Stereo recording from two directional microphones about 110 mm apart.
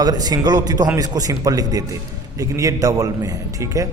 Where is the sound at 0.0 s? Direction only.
35° right (ahead or behind).